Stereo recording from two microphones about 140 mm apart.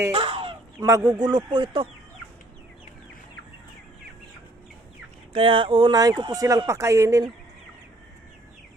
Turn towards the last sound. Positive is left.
turn(degrees=-25)  # may be behind; listen again after turning